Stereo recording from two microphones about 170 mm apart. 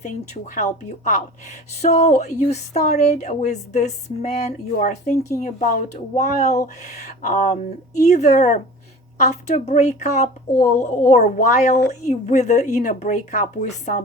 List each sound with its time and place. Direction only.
0.0 s a woman's voice: 50° left (ahead or behind)